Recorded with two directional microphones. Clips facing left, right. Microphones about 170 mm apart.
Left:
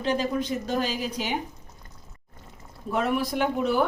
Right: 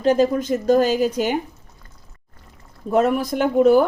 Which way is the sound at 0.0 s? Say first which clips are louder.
Right 9 dB; 45° right (ahead or behind).